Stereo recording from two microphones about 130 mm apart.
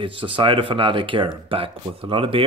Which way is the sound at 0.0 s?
40° right (ahead or behind).